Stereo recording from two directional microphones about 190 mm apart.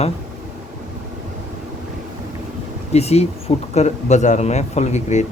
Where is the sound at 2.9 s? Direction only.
35° left (ahead or behind).